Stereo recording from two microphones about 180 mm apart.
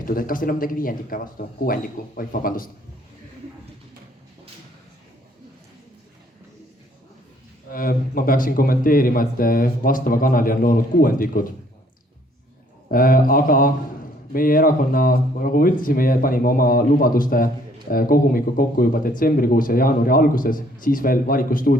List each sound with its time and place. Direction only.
0.0 s speech: 50° left (ahead or behind)
7.7 s speech: 50° left (ahead or behind)
12.9 s speech: 50° left (ahead or behind)